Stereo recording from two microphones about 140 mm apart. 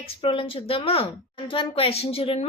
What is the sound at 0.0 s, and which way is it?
A woman's voice, 40° left (ahead or behind).